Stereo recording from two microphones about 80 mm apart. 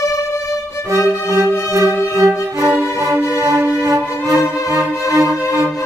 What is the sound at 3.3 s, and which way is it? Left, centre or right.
Music, right.